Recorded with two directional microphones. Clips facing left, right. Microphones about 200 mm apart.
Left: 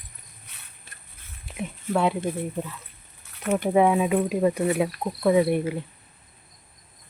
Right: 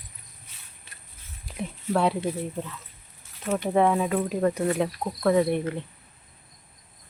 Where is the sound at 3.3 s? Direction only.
65° left (ahead or behind).